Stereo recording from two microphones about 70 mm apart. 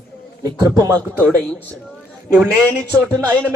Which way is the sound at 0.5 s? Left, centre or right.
Right.